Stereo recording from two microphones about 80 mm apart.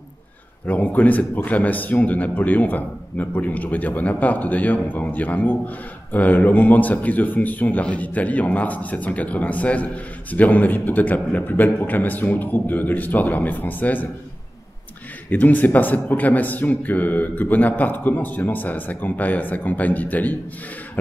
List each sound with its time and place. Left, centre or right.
0.7 s a man's voice: left
15.2 s a man's voice: left